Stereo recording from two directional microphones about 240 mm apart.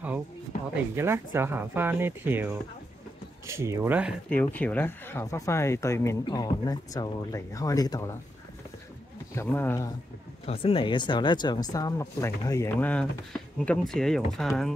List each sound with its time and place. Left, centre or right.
0.9 s speech: centre
4.3 s speech: centre
9.3 s speech: centre
10.4 s speech: left; by 14.5 s centre